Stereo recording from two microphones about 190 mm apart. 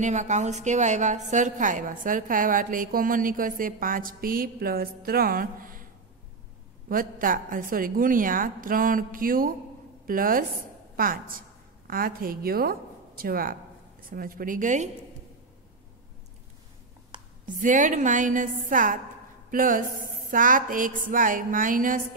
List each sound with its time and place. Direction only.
0.0 s a woman's voice: 40° right (ahead or behind)
6.9 s a woman's voice: 45° right (ahead or behind)
17.6 s a woman's voice: 40° right (ahead or behind)